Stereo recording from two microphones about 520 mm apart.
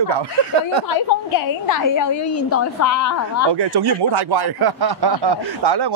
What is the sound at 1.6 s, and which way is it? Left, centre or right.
A woman's voice, left.